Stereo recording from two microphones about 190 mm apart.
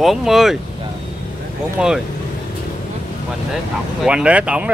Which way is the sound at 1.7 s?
5° right (ahead or behind).